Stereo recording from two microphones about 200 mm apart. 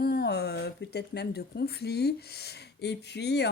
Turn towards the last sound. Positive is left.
turn(degrees=55)  # may be behind; listen again after turning